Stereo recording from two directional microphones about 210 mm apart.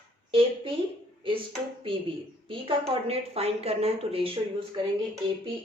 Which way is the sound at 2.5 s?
25° right (ahead or behind).